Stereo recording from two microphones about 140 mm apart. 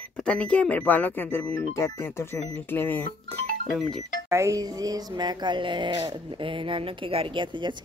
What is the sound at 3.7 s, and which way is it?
Speech, 5° left (ahead or behind).